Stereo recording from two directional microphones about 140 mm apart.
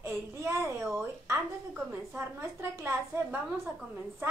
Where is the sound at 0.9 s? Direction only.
20° right (ahead or behind).